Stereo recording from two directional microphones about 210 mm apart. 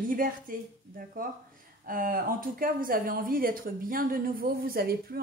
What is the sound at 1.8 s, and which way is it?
Speech, 40° right (ahead or behind).